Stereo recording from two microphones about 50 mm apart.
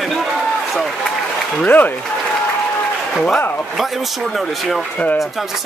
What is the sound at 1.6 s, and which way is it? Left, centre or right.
Speech, left.